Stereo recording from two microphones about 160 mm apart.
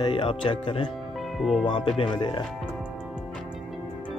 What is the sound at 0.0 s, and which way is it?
Speech, 30° left (ahead or behind).